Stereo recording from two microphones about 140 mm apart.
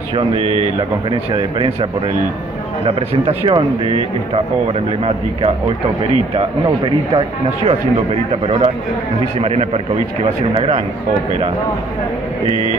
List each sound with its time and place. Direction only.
0.1 s speech: 45° right (ahead or behind)
2.9 s speech: 40° right (ahead or behind)